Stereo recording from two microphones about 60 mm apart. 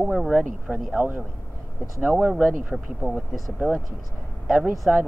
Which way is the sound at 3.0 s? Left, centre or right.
Left.